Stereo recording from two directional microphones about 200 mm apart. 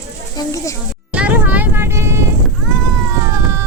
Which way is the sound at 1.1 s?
5° right (ahead or behind).